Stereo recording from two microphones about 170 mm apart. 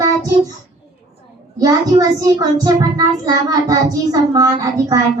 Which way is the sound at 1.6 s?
25° right (ahead or behind).